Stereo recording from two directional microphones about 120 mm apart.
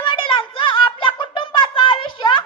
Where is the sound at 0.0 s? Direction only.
45° left (ahead or behind).